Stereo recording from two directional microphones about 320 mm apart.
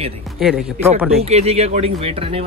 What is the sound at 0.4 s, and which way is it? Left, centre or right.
Speech, centre.